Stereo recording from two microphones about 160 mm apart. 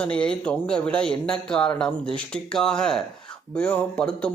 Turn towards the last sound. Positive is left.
turn(degrees=5)  # may be behind; listen again after turning